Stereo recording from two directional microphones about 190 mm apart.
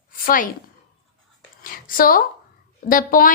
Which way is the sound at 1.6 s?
45° left (ahead or behind).